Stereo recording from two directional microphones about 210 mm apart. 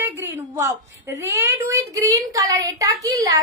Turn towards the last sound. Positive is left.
turn(degrees=-15)  # may be behind; listen again after turning